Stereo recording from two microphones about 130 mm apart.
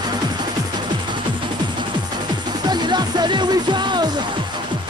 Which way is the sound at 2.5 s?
35° right (ahead or behind).